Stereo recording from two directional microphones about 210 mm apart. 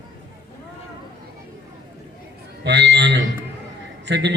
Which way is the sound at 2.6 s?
55° right (ahead or behind).